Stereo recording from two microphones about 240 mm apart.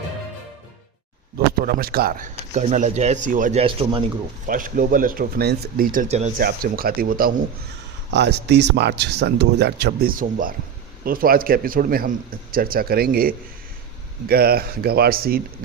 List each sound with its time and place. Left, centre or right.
1.6 s speech: right
4.4 s speech: right